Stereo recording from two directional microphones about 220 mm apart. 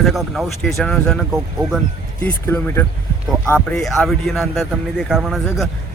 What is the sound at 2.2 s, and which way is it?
Speech, 10° left (ahead or behind).